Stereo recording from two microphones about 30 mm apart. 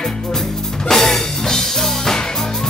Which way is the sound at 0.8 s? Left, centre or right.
Centre.